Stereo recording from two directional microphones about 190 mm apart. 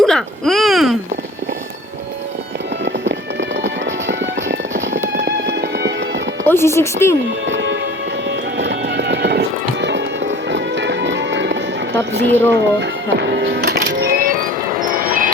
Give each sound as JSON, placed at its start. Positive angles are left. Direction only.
{"t": 0.0, "sound": "a sound", "side_deg": 0}
{"t": 2.8, "sound": "music", "side_deg": -70}
{"t": 5.1, "sound": "music", "side_deg": -60}
{"t": 6.4, "sound": "speech", "side_deg": 10}
{"t": 7.4, "sound": "music", "side_deg": -75}